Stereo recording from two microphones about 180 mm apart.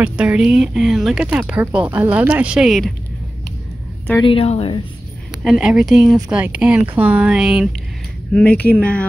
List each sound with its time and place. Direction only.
0.0 s speech: 5° right (ahead or behind)
4.2 s speech: 30° left (ahead or behind)
5.4 s speech: 5° right (ahead or behind)